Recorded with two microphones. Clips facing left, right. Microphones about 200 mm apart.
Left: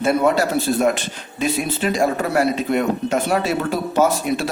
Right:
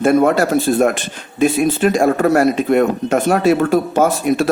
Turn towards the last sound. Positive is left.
turn(degrees=-50)  # may be behind; listen again after turning